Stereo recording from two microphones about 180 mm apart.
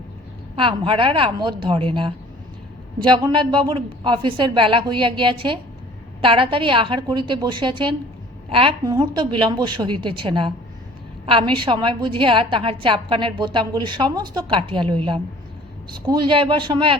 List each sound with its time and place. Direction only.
0.5 s a woman's voice: 30° right (ahead or behind)
16.0 s a woman's voice: 25° right (ahead or behind)